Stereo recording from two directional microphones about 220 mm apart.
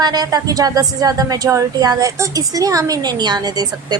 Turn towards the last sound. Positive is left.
turn(degrees=-20)  # may be behind; listen again after turning